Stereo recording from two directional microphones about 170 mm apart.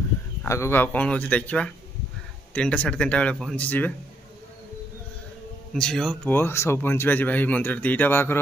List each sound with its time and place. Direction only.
0.5 s speech: 15° left (ahead or behind)
5.8 s speech: 5° left (ahead or behind)